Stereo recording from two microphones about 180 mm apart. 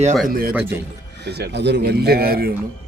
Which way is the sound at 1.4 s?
70° right (ahead or behind).